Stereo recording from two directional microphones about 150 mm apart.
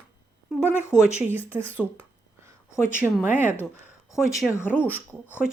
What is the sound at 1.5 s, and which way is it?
Speech, 10° right (ahead or behind).